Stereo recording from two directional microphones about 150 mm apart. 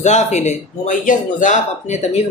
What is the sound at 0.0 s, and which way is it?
Speech, 50° left (ahead or behind).